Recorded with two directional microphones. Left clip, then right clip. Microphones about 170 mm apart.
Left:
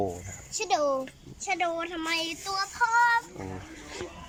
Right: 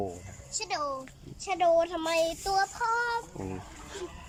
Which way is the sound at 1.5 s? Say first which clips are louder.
Right 4 dB; 20° right (ahead or behind).